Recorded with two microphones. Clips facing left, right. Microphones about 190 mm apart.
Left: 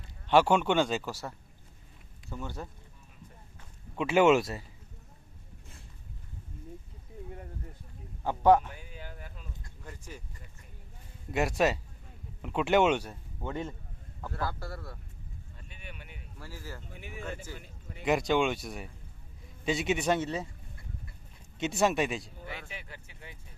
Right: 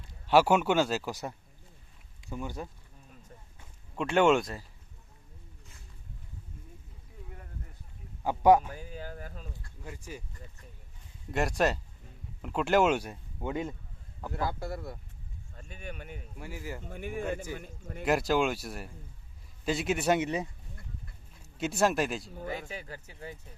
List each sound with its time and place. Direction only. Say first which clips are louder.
0.3 s speech: even; 5° right (ahead or behind)
2.3 s speech: right 2 dB; 10° right (ahead or behind)
3.9 s speech: left 1 dB; 5° left (ahead or behind)
8.2 s speech: right 1 dB; 10° right (ahead or behind)
8.7 s a sound: right 5 dB; 40° right (ahead or behind)
9.8 s speech: right 4 dB; 10° right (ahead or behind)
11.3 s speech: left 1 dB; centre (ahead or behind)
13.0 s speech: right 2 dB; 15° right (ahead or behind)
15.5 s speech: right 7 dB; 45° right (ahead or behind)
16.4 s speech: right 4 dB; 15° right (ahead or behind)
16.8 s a man's voice: right 9 dB; 50° right (ahead or behind)
18.0 s speech: even; centre (ahead or behind)
21.6 s speech: even; centre (ahead or behind)
22.4 s speech: right 6 dB; 40° right (ahead or behind)